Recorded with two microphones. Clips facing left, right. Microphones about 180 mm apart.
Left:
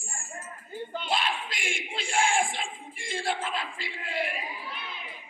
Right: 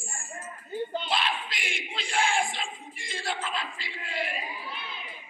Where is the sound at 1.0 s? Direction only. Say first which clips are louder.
Even; 45° left (ahead or behind).